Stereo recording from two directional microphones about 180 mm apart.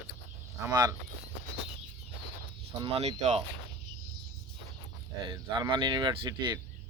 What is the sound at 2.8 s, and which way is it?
Speech, 35° right (ahead or behind).